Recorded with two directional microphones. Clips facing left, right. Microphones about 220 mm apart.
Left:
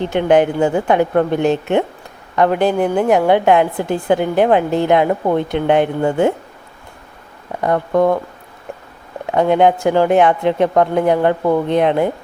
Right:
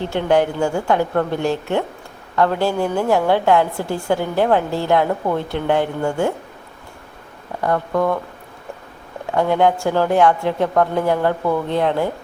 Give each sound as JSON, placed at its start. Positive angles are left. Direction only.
{"t": 0.0, "sound": "a woman's voice", "side_deg": 15}
{"t": 7.6, "sound": "a woman's voice", "side_deg": 20}
{"t": 9.3, "sound": "a woman's voice", "side_deg": 20}